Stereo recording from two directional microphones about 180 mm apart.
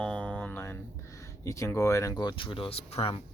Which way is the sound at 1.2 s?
15° left (ahead or behind).